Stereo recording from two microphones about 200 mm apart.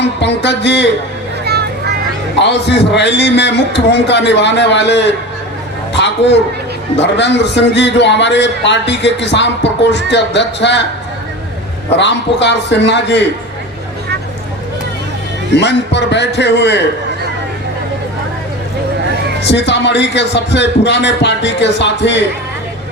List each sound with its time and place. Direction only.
0.0 s a man's voice: 60° left (ahead or behind)
1.5 s a sound: 55° right (ahead or behind)
2.4 s a man's voice: 60° left (ahead or behind)
11.9 s a man's voice: 60° left (ahead or behind)
15.5 s a man's voice: 60° left (ahead or behind)
19.4 s a man's voice: 60° left (ahead or behind)